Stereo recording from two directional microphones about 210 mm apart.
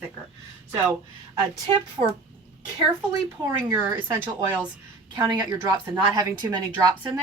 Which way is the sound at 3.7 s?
10° right (ahead or behind).